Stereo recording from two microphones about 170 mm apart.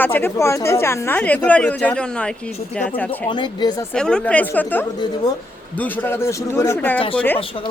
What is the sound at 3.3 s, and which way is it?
Speech, 25° left (ahead or behind).